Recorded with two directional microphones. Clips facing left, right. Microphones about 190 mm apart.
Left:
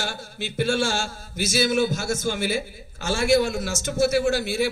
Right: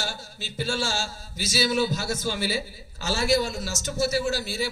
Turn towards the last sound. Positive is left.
turn(degrees=55)  # may be behind; listen again after turning